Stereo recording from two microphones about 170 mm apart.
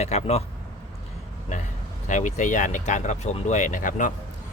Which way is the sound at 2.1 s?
45° left (ahead or behind).